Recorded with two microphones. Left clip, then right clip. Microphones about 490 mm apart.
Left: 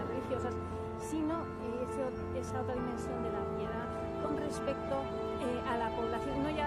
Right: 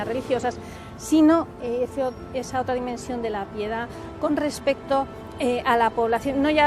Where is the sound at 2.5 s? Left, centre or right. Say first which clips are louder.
Right 14 dB; right.